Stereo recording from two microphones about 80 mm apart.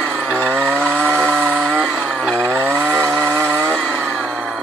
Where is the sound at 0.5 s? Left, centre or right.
Right.